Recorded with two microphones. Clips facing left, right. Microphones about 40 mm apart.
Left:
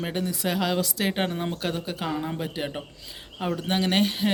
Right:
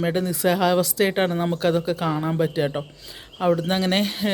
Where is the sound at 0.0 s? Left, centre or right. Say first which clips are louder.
Right 6 dB; centre.